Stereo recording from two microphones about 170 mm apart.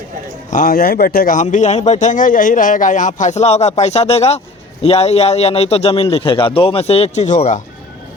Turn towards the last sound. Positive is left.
turn(degrees=45)  # may be behind; listen again after turning